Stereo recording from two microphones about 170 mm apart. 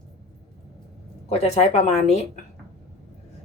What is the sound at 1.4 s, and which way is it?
Speech, 40° left (ahead or behind).